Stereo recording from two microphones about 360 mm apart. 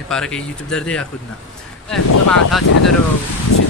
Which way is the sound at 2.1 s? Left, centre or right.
Left.